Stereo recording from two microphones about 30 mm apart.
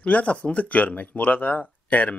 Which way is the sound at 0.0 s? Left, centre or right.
Left.